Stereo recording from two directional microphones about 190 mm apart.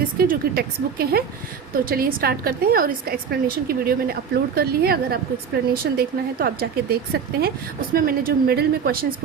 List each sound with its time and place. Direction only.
0.2 s a woman's voice: 55° right (ahead or behind)